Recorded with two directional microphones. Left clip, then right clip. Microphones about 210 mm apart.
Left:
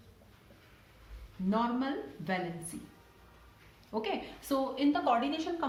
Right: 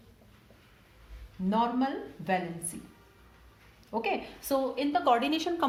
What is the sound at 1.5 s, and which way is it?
Speech, 35° right (ahead or behind).